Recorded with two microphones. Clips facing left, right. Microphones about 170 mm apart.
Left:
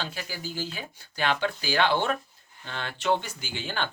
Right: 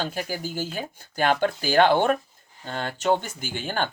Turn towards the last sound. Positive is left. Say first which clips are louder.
# right 4 dB
turn(degrees=-50)  # may be behind; listen again after turning